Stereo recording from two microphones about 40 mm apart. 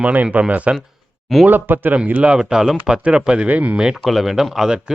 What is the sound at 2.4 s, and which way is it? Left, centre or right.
Speech, centre.